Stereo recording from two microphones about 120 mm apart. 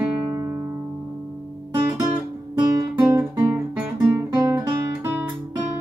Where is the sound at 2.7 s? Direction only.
30° right (ahead or behind).